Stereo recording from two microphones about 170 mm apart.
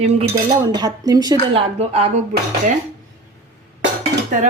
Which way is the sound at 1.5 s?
40° right (ahead or behind).